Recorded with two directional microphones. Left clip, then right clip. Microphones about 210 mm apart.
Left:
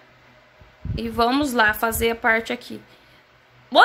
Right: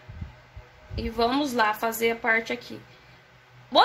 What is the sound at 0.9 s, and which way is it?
Speech, 30° left (ahead or behind).